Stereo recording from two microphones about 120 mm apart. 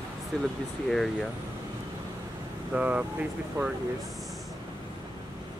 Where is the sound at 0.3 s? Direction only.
5° left (ahead or behind).